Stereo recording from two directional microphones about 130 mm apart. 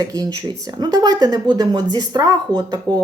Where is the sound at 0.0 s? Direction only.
30° right (ahead or behind).